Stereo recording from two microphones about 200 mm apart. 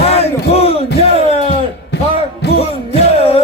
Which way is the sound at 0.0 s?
30° left (ahead or behind).